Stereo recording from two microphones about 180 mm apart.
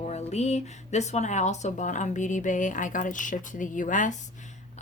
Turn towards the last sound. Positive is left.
turn(degrees=45)  # may be behind; listen again after turning